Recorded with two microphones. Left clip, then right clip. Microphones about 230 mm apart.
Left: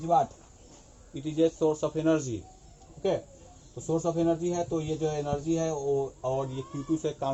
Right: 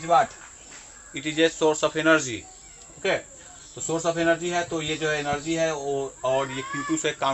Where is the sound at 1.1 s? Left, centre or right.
Centre.